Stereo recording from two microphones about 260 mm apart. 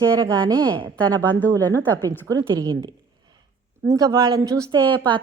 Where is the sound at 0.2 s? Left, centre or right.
Centre.